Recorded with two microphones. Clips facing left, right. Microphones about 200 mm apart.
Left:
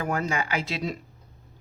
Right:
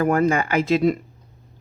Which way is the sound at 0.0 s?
55° right (ahead or behind).